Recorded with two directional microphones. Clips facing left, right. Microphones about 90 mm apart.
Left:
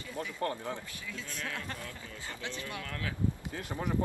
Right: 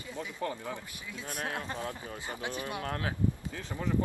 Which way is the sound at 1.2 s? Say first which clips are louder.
Right 6 dB; 55° right (ahead or behind).